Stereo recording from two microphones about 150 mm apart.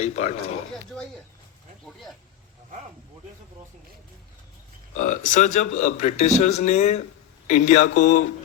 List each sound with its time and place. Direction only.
0.0 s a man's voice: 50° left (ahead or behind)
4.9 s a man's voice: 60° left (ahead or behind)